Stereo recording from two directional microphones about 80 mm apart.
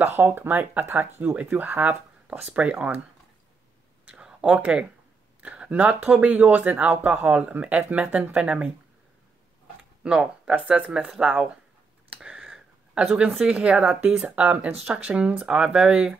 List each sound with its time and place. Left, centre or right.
0.0 s speech: right
1.3 s speech: centre
4.0 s a sound: centre
4.6 s speech: centre
10.0 s speech: centre
12.1 s a sound: centre
13.4 s speech: centre